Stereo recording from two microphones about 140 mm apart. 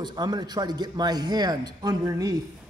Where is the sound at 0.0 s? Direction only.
30° right (ahead or behind).